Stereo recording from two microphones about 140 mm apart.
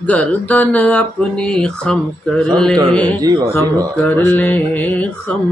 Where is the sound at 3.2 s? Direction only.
25° right (ahead or behind).